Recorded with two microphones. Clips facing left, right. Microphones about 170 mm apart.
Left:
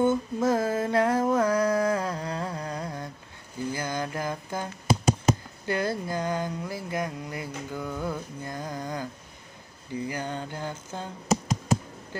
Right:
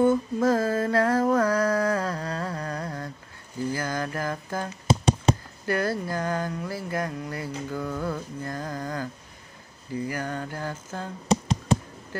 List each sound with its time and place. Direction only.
0.0 s female singing: 20° left (ahead or behind)
1.3 s a sound: 20° left (ahead or behind)
3.7 s mantra: 20° left (ahead or behind)
4.8 s tap: 30° right (ahead or behind)
5.7 s a sound: 20° left (ahead or behind)
10.0 s mantra: 20° left (ahead or behind)